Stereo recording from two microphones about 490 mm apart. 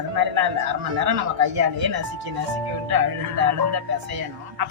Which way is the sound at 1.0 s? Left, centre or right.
Right.